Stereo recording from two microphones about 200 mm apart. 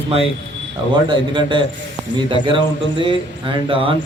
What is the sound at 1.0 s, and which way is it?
Speech, 25° right (ahead or behind).